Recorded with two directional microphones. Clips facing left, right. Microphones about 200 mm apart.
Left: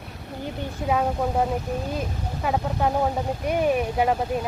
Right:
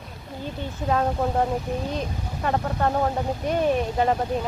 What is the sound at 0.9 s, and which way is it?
Speech, 5° left (ahead or behind).